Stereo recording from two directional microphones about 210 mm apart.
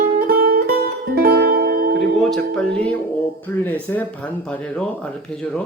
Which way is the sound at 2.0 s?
Centre (ahead or behind).